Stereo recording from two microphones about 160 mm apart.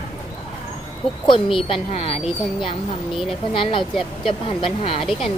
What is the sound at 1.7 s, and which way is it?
Speech, 35° left (ahead or behind).